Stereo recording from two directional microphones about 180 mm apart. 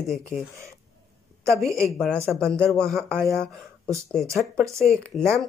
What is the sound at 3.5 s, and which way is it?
Speech, 15° right (ahead or behind).